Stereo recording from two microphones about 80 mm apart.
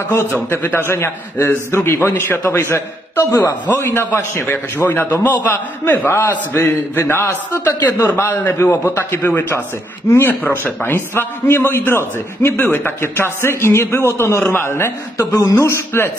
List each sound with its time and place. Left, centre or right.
0.5 s a man's voice: left